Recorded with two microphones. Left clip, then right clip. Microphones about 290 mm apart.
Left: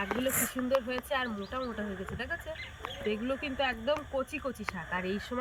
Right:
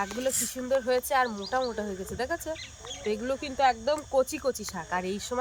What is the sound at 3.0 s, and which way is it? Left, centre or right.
Speech, centre.